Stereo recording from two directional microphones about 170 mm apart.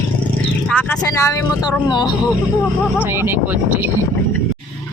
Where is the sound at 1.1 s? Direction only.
20° left (ahead or behind).